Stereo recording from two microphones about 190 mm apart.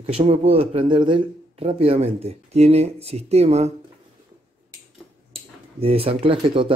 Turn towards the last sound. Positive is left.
turn(degrees=-30)  # may be behind; listen again after turning